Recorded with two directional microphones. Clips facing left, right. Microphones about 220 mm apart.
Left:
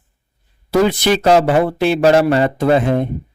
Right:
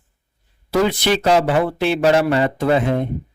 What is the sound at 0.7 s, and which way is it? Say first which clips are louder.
Speech: left 3 dB; 45° left (ahead or behind).